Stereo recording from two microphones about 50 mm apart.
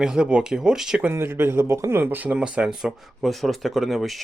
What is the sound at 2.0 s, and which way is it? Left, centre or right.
Speech, right.